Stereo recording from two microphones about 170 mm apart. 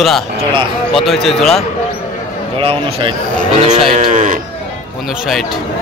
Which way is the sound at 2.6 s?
35° right (ahead or behind).